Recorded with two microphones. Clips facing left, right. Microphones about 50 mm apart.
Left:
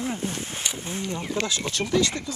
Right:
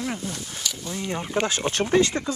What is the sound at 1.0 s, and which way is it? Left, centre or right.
Speech, right.